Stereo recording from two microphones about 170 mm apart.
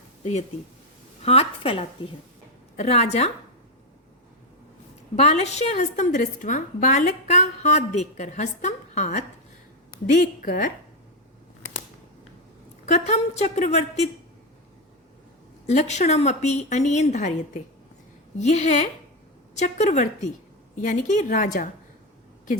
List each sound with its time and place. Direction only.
1.2 s a woman's voice: 35° left (ahead or behind)
5.1 s a woman's voice: 40° left (ahead or behind)
12.8 s a woman's voice: 40° left (ahead or behind)
15.6 s a woman's voice: 40° left (ahead or behind)